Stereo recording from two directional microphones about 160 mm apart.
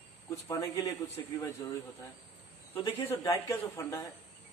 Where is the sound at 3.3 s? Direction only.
20° left (ahead or behind).